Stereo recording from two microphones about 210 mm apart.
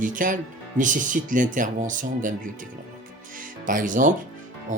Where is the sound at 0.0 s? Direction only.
40° right (ahead or behind).